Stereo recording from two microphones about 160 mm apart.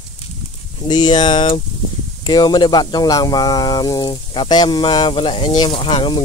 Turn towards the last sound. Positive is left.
turn(degrees=30)  # may be behind; listen again after turning